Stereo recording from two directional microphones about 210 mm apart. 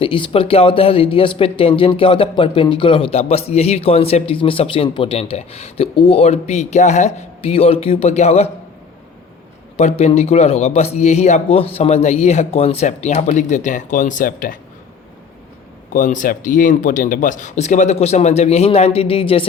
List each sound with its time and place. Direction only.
0.0 s speech: 25° left (ahead or behind)
9.7 s a man's voice: 30° left (ahead or behind)
15.9 s a man's voice: 35° left (ahead or behind)